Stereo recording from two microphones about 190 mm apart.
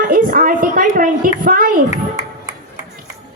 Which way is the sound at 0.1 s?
50° right (ahead or behind).